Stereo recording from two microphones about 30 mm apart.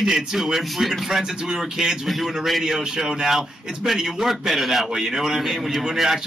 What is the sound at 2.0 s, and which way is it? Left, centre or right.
A man's voice, centre.